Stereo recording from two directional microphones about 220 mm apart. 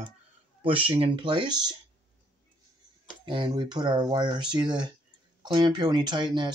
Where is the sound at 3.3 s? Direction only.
20° right (ahead or behind).